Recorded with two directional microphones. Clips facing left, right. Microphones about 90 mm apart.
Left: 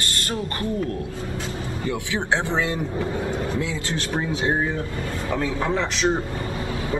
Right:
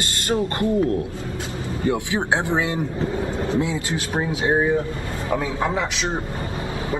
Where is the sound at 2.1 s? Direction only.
15° right (ahead or behind).